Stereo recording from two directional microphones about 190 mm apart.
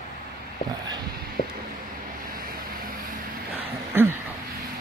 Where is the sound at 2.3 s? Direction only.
50° right (ahead or behind).